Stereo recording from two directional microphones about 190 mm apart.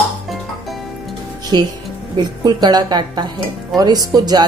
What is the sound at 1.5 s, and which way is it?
Speech, 25° right (ahead or behind).